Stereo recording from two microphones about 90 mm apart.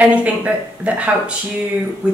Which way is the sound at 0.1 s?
15° right (ahead or behind).